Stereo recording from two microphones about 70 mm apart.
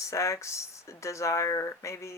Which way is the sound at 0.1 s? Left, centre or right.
Left.